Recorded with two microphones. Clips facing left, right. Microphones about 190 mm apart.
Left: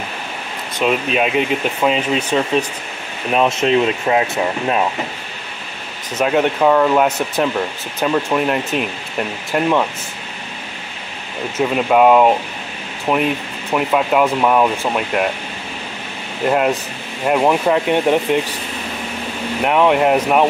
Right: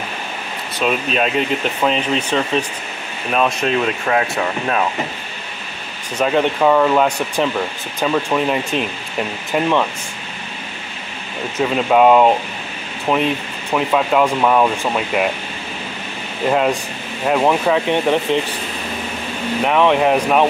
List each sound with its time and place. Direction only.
0.7 s speech: 15° left (ahead or behind)
3.3 s speech: 20° left (ahead or behind)
6.1 s speech: 5° left (ahead or behind)
11.6 s speech: centre (ahead or behind)
16.4 s speech: 5° left (ahead or behind)
19.6 s speech: 10° left (ahead or behind)